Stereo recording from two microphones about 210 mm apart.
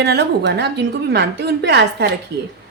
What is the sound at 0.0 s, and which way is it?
A woman's voice, 50° right (ahead or behind).